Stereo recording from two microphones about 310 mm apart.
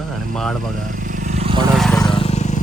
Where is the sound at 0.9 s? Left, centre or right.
Right.